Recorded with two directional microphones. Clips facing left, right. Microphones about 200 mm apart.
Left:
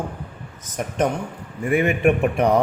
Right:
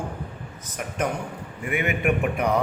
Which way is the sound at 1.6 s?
35° left (ahead or behind).